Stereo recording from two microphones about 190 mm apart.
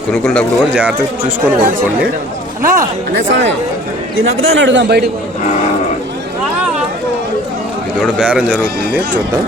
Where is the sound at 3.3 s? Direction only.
70° right (ahead or behind).